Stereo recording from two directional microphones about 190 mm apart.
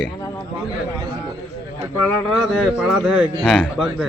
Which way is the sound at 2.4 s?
Centre (ahead or behind).